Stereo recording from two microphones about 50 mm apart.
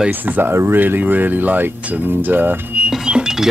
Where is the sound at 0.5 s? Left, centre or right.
Right.